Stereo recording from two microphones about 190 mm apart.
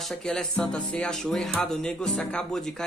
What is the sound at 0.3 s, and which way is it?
Speech, 5° left (ahead or behind).